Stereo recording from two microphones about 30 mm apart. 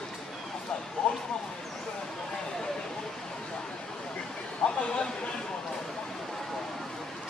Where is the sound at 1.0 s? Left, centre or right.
Left.